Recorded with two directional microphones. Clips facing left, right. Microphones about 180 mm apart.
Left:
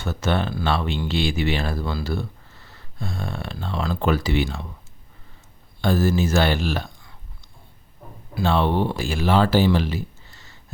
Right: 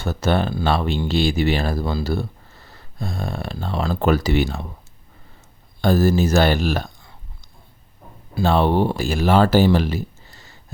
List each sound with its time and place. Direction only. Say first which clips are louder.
0.0 s speech: right 3 dB; 35° right (ahead or behind)
5.8 s speech: right 3 dB; 40° right (ahead or behind)
8.4 s speech: right 3 dB; 40° right (ahead or behind)